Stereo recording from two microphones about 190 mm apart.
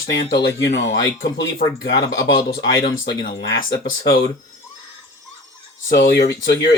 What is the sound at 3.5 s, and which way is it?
Speech, 75° left (ahead or behind).